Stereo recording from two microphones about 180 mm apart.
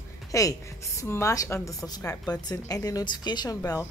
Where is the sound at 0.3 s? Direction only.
20° left (ahead or behind).